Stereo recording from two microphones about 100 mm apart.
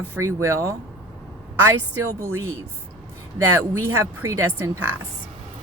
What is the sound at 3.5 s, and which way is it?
Speech, 25° right (ahead or behind).